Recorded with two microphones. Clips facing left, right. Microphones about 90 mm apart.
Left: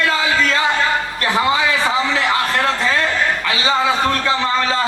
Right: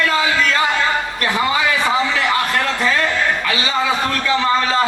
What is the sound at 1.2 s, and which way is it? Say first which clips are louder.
Speech: left 3 dB; 30° left (ahead or behind).